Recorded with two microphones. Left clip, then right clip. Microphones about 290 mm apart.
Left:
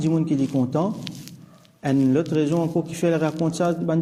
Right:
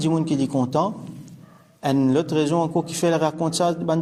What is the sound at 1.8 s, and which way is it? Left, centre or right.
A man's voice, centre.